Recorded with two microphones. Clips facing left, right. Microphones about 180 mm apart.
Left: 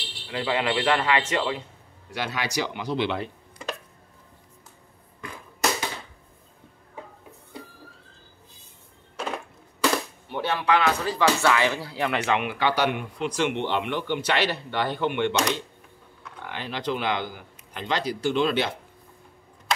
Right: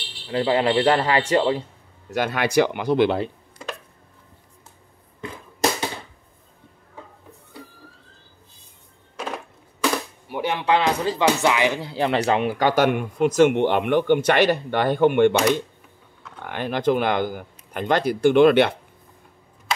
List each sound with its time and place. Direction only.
0.3 s speech: 30° right (ahead or behind)
2.0 s speech: 50° right (ahead or behind)
5.2 s a sound: 30° right (ahead or behind)
10.2 s music: 10° right (ahead or behind)
10.6 s speech: 25° right (ahead or behind)
11.9 s speech: 30° right (ahead or behind); by 15.4 s 50° right (ahead or behind)
16.4 s speech: 50° right (ahead or behind)